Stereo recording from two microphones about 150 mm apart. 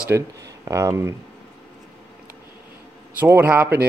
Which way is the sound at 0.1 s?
20° right (ahead or behind).